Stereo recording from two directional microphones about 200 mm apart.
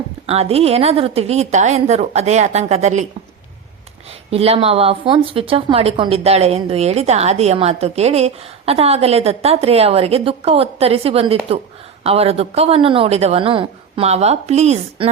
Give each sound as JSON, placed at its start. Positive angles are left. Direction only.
{"t": 0.3, "sound": "a woman's voice", "side_deg": -30}
{"t": 4.3, "sound": "a woman's voice", "side_deg": -30}